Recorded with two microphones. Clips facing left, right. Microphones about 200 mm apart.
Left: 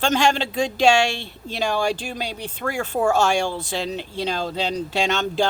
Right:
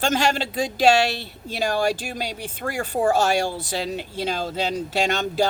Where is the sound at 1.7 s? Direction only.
40° right (ahead or behind).